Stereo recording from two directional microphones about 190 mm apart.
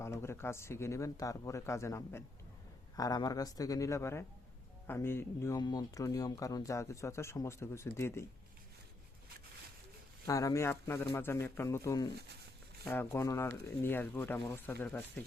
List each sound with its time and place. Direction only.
0.0 s speech: 15° left (ahead or behind)
10.2 s speech: 15° left (ahead or behind)